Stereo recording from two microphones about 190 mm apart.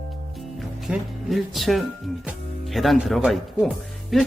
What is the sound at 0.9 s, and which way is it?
A man's voice, centre (ahead or behind).